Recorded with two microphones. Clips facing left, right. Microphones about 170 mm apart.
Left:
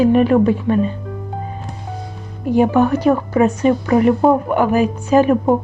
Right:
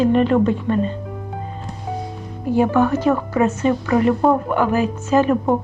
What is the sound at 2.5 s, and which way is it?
Speech, 15° left (ahead or behind).